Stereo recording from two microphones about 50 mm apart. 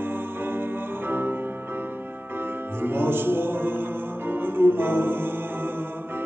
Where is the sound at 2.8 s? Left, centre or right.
Right.